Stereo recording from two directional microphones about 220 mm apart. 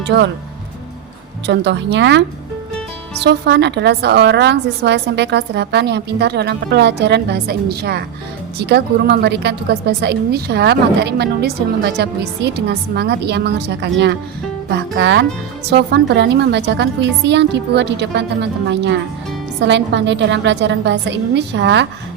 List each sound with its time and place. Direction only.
0.1 s a woman's voice: 50° right (ahead or behind)
1.5 s a woman's voice: 50° right (ahead or behind)
3.2 s a woman's voice: 50° right (ahead or behind)